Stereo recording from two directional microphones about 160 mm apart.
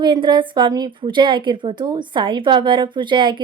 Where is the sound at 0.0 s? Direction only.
30° right (ahead or behind).